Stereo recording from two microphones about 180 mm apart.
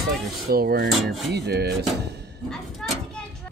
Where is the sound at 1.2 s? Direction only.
70° right (ahead or behind).